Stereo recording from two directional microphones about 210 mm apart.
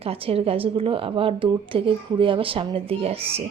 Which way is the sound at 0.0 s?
30° right (ahead or behind).